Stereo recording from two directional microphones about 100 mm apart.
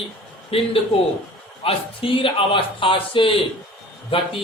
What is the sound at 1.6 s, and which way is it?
Speech, 60° left (ahead or behind).